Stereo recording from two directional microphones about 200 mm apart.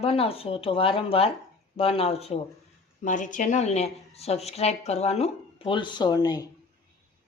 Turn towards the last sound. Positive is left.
turn(degrees=20)  # may be behind; listen again after turning